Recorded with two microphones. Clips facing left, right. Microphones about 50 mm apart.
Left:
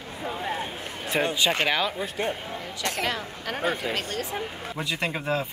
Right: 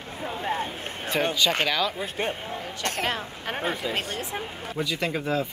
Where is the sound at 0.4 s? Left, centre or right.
Right.